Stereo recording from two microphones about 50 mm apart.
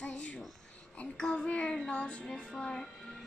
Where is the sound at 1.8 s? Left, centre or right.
Left.